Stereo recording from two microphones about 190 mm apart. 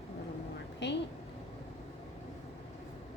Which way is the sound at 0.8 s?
65° left (ahead or behind).